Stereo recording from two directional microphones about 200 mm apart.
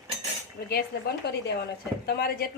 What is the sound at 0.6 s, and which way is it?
A woman's voice, 50° left (ahead or behind).